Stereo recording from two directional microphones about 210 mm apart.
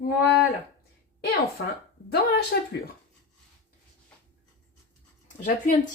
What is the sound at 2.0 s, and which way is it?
Speech, 50° left (ahead or behind).